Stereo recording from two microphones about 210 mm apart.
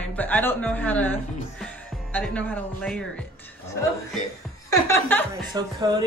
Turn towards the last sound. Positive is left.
turn(degrees=-20)  # may be behind; listen again after turning